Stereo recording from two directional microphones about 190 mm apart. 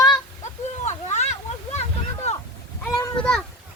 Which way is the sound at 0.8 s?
35° left (ahead or behind).